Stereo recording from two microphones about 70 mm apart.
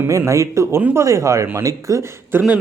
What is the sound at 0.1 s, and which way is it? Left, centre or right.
A man's voice, right.